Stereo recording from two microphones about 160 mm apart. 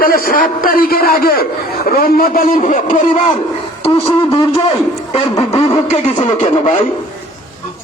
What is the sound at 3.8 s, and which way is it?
A man's voice, 35° left (ahead or behind).